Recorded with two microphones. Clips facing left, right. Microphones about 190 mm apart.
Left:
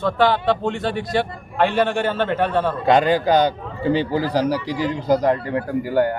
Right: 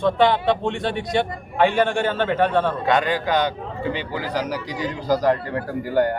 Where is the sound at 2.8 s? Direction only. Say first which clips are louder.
Left 4 dB; 35° left (ahead or behind).